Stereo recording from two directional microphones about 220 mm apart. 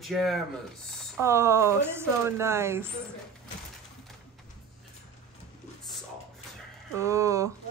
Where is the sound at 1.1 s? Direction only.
10° right (ahead or behind).